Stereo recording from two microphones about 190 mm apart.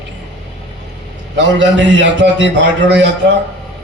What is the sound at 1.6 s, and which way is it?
A man's voice, 70° right (ahead or behind).